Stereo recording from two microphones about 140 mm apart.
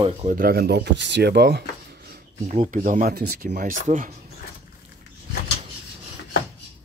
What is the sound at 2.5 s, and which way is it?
Speech, 65° right (ahead or behind).